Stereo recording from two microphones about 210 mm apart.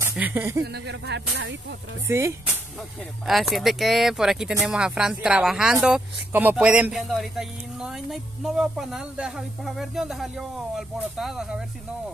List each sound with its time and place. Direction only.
0.1 s speech: 10° right (ahead or behind)
0.7 s speech: 55° right (ahead or behind)
2.0 s speech: 15° right (ahead or behind)
3.3 s speech: centre (ahead or behind)